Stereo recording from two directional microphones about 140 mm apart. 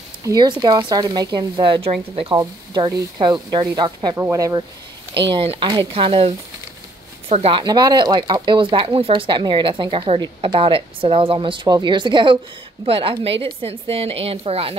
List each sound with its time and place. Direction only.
0.2 s speech: 30° right (ahead or behind); by 2.3 s 45° right (ahead or behind)
2.3 s speech: 30° right (ahead or behind)
5.1 s a woman's voice: 40° right (ahead or behind)
7.6 s a woman's voice: 30° right (ahead or behind)